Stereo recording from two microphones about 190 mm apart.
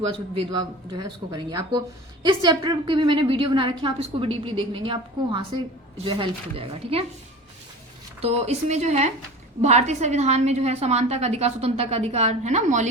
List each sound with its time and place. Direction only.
0.1 s a woman's voice: 25° right (ahead or behind)
8.2 s a woman's voice: 35° right (ahead or behind)